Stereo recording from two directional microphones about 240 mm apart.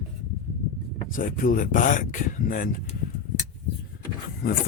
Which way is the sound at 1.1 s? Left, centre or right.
Left.